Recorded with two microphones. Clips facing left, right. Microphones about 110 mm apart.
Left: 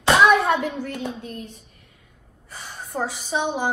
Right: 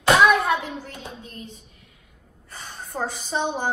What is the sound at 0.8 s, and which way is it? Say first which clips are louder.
Speech: left 8 dB; 60° left (ahead or behind).